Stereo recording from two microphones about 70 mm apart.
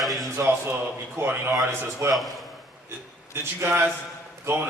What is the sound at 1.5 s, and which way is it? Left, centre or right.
Speech, right.